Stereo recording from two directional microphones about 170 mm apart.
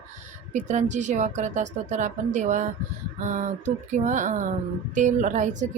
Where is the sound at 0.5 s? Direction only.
45° right (ahead or behind).